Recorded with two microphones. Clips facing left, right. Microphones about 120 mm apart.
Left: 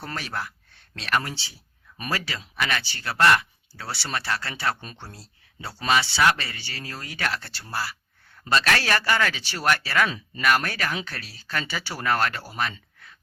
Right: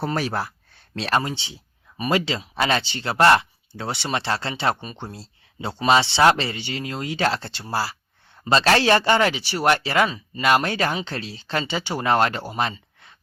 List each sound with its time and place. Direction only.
0.2 s speech: 35° right (ahead or behind)
1.2 s speech: 20° right (ahead or behind)
10.1 s speech: centre (ahead or behind)
10.4 s speech: 25° right (ahead or behind)